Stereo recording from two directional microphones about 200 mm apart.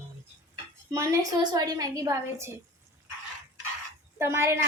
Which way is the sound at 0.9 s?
15° right (ahead or behind).